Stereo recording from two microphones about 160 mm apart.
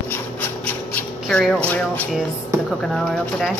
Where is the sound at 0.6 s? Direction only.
5° left (ahead or behind).